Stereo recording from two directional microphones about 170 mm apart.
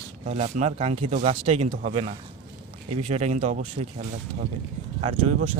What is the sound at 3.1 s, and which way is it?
Speech, 40° right (ahead or behind).